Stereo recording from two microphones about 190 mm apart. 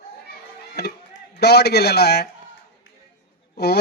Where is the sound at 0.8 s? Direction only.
60° left (ahead or behind).